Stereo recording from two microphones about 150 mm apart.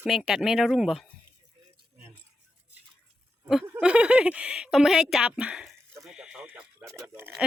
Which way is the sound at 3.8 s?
5° right (ahead or behind).